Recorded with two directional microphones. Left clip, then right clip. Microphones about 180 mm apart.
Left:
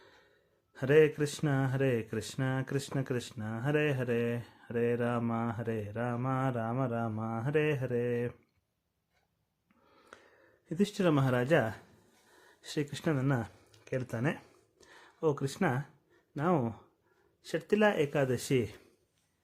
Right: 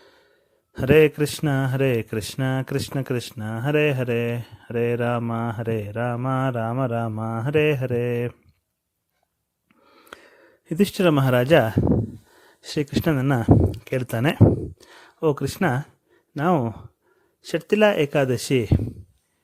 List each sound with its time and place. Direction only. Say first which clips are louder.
0.7 s speech: right 9 dB; 45° right (ahead or behind)
9.8 s a sound: right 12 dB; 45° right (ahead or behind)
12.3 s speech: right 9 dB; 40° right (ahead or behind)